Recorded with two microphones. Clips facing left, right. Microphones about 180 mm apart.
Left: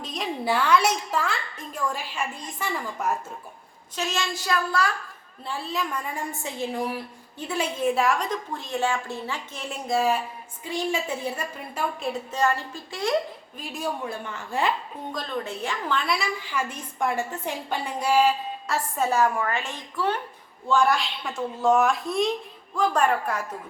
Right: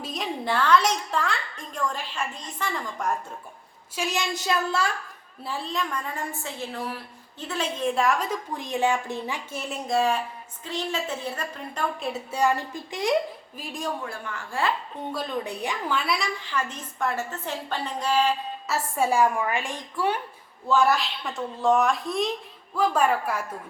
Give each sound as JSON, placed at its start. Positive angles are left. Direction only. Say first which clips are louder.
{"t": 0.0, "sound": "a sound", "louder": "even", "side_deg": 0}
{"t": 0.4, "sound": "a woman's voice", "louder": "even", "side_deg": 10}
{"t": 3.9, "sound": "a woman's voice", "louder": "right 1 dB", "side_deg": -15}
{"t": 5.5, "sound": "a woman's voice", "louder": "even", "side_deg": 5}
{"t": 8.5, "sound": "a woman's voice", "louder": "right 3 dB", "side_deg": -15}
{"t": 12.3, "sound": "speech", "louder": "right 2 dB", "side_deg": -15}
{"t": 13.6, "sound": "a woman's voice", "louder": "left 1 dB", "side_deg": 5}
{"t": 14.0, "sound": "a woman's voice", "louder": "left 2 dB", "side_deg": 20}
{"t": 15.1, "sound": "a woman's voice", "louder": "right 1 dB", "side_deg": -10}
{"t": 18.7, "sound": "a woman's voice", "louder": "right 1 dB", "side_deg": -10}